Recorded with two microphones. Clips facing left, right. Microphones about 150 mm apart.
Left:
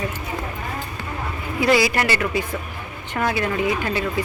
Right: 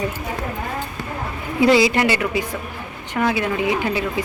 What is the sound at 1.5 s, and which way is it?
A woman's voice, 25° right (ahead or behind).